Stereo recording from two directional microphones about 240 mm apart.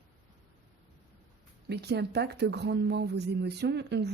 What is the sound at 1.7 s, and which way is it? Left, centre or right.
A woman's voice, right.